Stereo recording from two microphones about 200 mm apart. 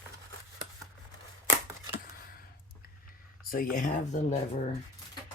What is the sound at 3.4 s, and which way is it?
Speech, 45° left (ahead or behind).